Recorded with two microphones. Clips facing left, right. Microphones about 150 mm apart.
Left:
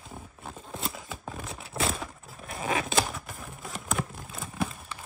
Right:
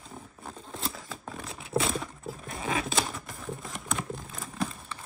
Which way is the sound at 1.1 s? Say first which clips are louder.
Left 1 dB; centre (ahead or behind).